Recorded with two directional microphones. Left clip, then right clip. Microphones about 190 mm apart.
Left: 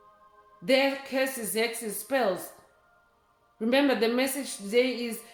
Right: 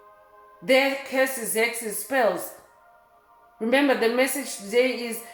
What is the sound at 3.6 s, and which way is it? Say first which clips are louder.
A woman's voice: right 3 dB; 30° left (ahead or behind).